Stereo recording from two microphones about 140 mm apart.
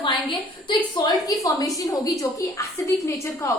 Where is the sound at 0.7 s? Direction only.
25° left (ahead or behind).